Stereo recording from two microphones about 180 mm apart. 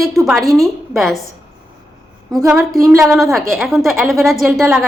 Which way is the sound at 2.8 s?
15° right (ahead or behind).